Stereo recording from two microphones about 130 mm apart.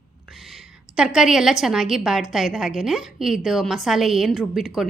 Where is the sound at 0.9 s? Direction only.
5° right (ahead or behind).